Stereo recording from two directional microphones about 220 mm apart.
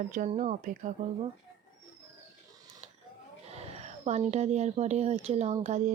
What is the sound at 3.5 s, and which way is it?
Speech, 30° right (ahead or behind).